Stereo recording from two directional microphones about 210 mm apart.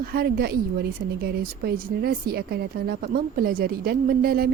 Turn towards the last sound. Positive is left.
turn(degrees=-45)  # may be behind; listen again after turning